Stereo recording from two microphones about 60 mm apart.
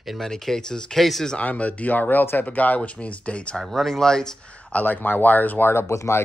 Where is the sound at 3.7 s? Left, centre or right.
Centre.